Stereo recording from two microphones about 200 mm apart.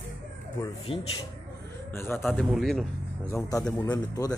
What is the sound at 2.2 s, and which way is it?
Speech, centre (ahead or behind).